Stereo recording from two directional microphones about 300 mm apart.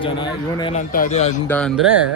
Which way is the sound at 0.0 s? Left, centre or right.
Centre.